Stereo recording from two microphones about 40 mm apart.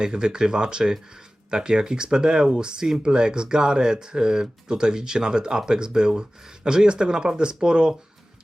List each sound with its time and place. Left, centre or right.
0.0 s speech: centre